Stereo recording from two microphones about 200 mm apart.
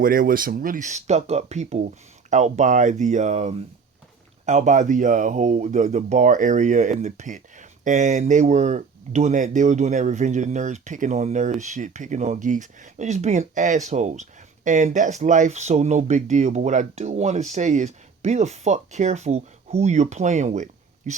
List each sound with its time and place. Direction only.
0.0 s speech: 45° right (ahead or behind)